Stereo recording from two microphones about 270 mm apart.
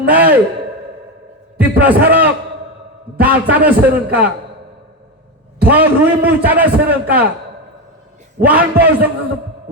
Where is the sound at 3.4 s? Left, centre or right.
Centre.